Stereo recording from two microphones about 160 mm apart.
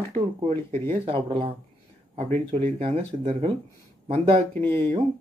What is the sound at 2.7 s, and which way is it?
Speech, 35° right (ahead or behind).